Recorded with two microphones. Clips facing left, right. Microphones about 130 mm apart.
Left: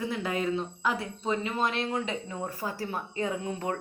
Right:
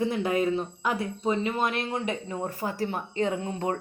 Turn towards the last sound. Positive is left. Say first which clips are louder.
# right 3 dB
turn(degrees=-30)  # may be behind; listen again after turning